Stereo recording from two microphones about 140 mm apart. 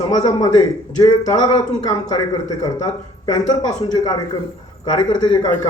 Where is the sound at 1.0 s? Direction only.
30° left (ahead or behind).